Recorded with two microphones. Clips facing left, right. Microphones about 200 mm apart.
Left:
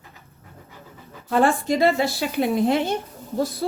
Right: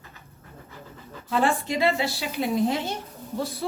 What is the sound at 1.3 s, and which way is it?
Speech, 45° left (ahead or behind).